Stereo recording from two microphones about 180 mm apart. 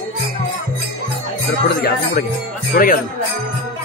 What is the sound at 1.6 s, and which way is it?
Speech, 60° left (ahead or behind).